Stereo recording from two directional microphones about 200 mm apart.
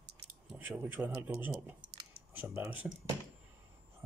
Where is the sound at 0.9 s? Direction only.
10° right (ahead or behind).